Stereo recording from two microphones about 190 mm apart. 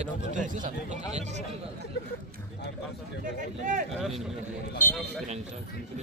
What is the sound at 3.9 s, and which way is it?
Speech, centre (ahead or behind).